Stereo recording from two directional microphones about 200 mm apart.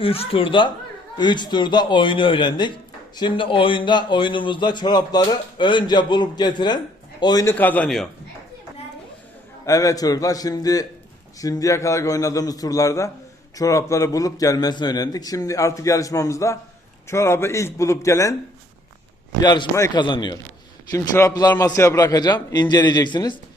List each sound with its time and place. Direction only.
0.0 s speech: 30° left (ahead or behind)
7.5 s a man's voice: 10° left (ahead or behind)
9.6 s a man's voice: 15° left (ahead or behind)
19.4 s a man's voice: 20° left (ahead or behind)